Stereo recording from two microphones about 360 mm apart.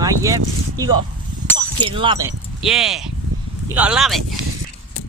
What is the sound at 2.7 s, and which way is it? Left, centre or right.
Speech, centre.